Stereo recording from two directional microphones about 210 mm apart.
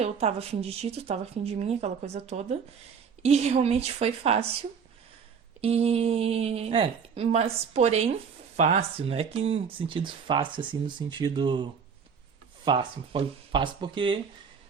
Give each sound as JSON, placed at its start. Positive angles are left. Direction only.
{"t": 0.0, "sound": "speech", "side_deg": -30}
{"t": 5.5, "sound": "speech", "side_deg": -30}